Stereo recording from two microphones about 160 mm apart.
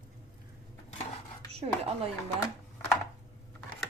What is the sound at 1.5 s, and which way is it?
Speech, 40° right (ahead or behind).